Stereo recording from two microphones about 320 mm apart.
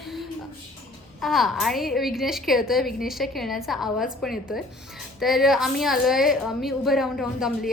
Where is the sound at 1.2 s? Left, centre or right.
Centre.